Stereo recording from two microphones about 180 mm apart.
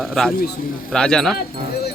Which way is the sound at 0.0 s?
Centre (ahead or behind).